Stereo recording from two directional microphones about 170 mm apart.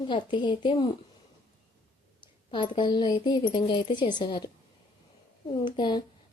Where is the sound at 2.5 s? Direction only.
30° left (ahead or behind).